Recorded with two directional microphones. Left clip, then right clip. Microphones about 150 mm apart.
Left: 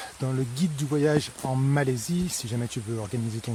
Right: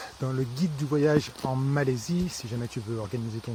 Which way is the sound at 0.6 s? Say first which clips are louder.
Even; 20° left (ahead or behind).